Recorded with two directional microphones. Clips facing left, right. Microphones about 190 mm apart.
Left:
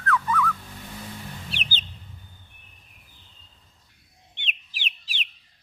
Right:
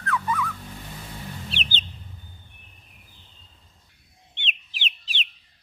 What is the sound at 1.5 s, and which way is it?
Chicken, 25° right (ahead or behind).